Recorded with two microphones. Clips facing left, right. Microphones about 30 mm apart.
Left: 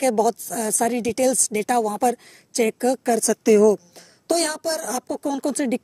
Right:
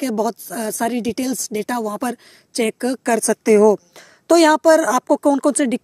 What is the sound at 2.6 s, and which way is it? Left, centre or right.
Speech, right.